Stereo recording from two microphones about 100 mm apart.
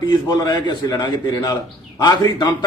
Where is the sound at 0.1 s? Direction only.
45° left (ahead or behind).